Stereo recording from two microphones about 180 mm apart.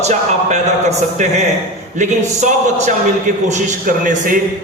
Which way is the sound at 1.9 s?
40° right (ahead or behind).